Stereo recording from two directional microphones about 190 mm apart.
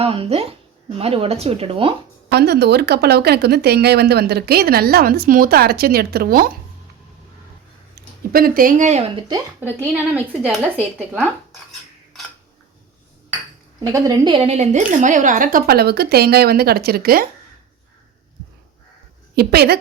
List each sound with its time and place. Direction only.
0.0 s speech: 30° right (ahead or behind)
2.3 s speech: 60° right (ahead or behind)
7.9 s speech: 50° right (ahead or behind)
9.6 s speech: 10° right (ahead or behind)
13.7 s speech: 20° right (ahead or behind); by 17.2 s 50° right (ahead or behind)
19.4 s speech: 55° right (ahead or behind)